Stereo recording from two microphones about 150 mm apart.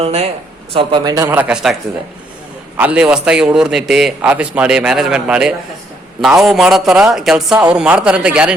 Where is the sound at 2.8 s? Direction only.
10° right (ahead or behind).